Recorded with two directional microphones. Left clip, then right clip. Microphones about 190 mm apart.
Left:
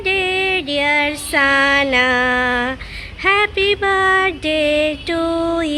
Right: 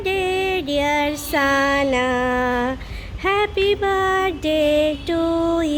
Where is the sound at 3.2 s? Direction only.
10° right (ahead or behind).